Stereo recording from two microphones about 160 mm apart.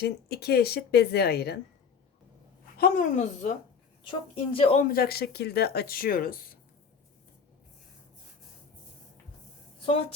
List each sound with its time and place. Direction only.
0.0 s a woman's voice: 85° left
2.8 s a woman's voice: 55° left (ahead or behind)
4.5 s speech: 35° left (ahead or behind)
4.8 s speech: 65° left (ahead or behind)
9.8 s speech: 35° left (ahead or behind)